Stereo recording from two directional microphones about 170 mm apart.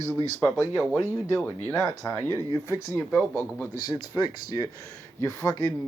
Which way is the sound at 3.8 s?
25° left (ahead or behind).